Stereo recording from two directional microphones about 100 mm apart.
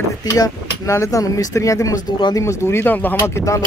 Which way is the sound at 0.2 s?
35° left (ahead or behind).